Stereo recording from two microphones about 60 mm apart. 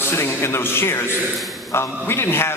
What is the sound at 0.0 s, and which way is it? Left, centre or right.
A man's voice, left.